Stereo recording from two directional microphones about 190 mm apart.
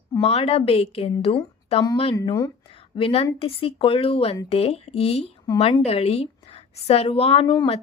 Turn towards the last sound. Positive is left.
turn(degrees=25)  # may be behind; listen again after turning